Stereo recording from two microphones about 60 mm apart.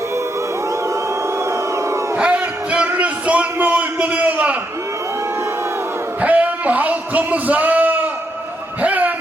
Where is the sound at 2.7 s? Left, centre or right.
Right.